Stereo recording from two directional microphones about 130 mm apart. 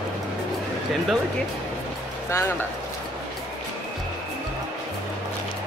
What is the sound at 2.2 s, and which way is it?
Speech, 20° left (ahead or behind).